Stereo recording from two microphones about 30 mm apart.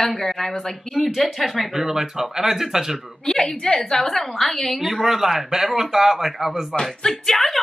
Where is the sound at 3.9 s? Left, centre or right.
Centre.